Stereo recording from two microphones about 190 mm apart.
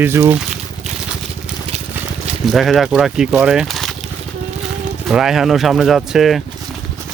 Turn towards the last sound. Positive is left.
turn(degrees=0)  # may be behind; listen again after turning